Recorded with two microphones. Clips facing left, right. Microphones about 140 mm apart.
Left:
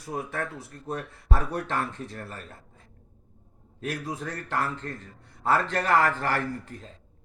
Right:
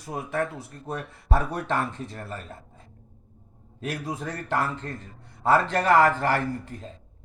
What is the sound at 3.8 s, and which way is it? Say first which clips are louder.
A man's voice: right 1 dB; 30° right (ahead or behind).